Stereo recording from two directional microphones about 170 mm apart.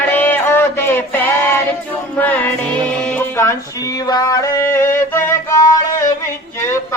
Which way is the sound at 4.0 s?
20° left (ahead or behind).